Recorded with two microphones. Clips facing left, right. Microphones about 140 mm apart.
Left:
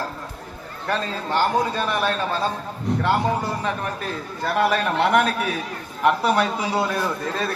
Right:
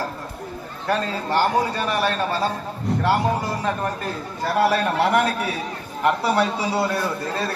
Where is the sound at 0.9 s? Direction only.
10° right (ahead or behind).